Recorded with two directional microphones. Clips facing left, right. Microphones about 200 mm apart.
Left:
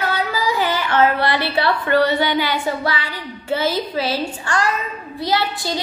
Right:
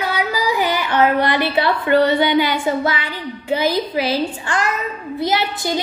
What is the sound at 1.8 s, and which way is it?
Speech, 20° right (ahead or behind).